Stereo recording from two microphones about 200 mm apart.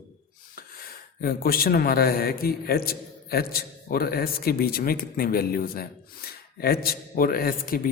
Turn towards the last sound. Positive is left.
turn(degrees=45)  # may be behind; listen again after turning